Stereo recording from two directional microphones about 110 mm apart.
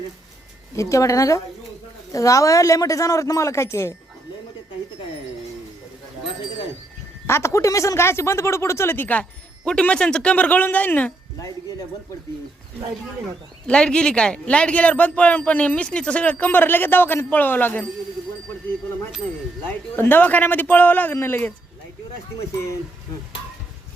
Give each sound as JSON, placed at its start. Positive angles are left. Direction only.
{"t": 0.8, "sound": "speech", "side_deg": 30}
{"t": 7.3, "sound": "speech", "side_deg": 25}
{"t": 13.7, "sound": "speech", "side_deg": 10}
{"t": 19.6, "sound": "speech", "side_deg": 15}